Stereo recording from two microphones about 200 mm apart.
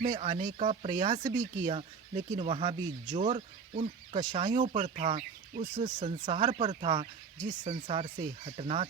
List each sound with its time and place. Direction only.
0.1 s speech: 25° right (ahead or behind)
4.9 s speech: 40° right (ahead or behind)
5.8 s speech: 25° right (ahead or behind)
7.3 s speech: 40° right (ahead or behind)
7.8 s speech: 25° right (ahead or behind)